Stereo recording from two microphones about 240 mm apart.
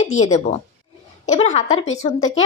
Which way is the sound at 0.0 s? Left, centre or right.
Left.